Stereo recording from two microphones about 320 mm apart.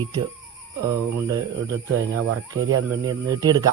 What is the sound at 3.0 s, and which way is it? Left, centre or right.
Speech, centre.